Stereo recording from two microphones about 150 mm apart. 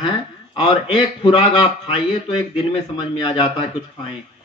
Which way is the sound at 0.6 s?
30° left (ahead or behind).